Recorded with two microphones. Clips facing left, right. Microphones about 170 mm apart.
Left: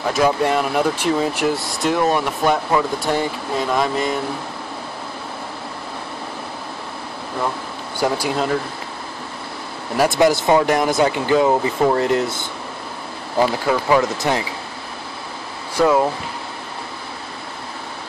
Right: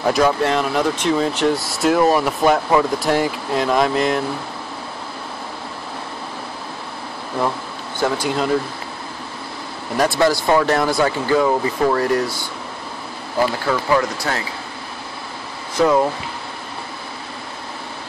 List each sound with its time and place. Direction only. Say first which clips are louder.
0.1 s speech: left 1 dB; 5° left (ahead or behind)
8.0 s speech: even; 5° left (ahead or behind)
10.0 s speech: left 2 dB; 20° left (ahead or behind)
13.7 s speech: left 1 dB; 20° left (ahead or behind)
15.7 s speech: even; 5° left (ahead or behind)